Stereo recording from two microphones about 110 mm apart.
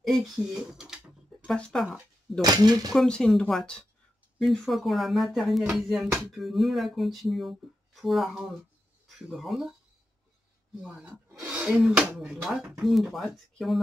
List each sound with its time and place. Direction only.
0.0 s speech: centre (ahead or behind)
1.5 s speech: 5° left (ahead or behind)
2.4 s speech: 35° right (ahead or behind)
2.9 s speech: 5° left (ahead or behind)
10.8 s speech: 5° right (ahead or behind)